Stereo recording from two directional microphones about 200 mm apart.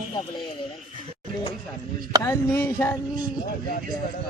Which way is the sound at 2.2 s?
15° left (ahead or behind).